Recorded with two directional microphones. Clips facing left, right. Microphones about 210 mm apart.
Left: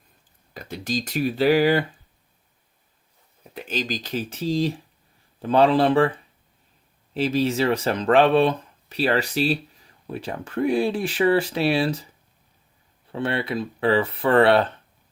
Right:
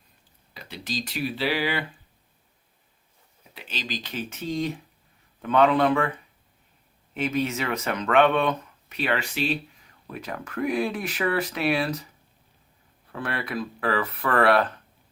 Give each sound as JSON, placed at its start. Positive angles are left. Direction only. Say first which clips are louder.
{"t": 0.5, "sound": "speech", "louder": "left 5 dB", "side_deg": 45}
{"t": 3.5, "sound": "speech", "louder": "left 7 dB", "side_deg": 45}
{"t": 13.1, "sound": "speech", "louder": "left 6 dB", "side_deg": 25}